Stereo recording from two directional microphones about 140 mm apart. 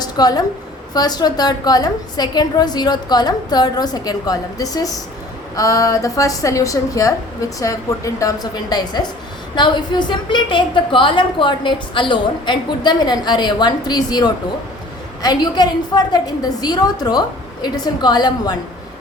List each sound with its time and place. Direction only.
0.0 s a woman's voice: 30° left (ahead or behind)